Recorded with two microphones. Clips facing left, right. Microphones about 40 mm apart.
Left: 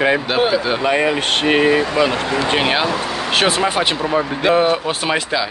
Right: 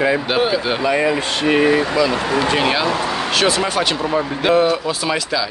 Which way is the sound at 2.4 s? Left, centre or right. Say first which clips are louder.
Left 2 dB; left.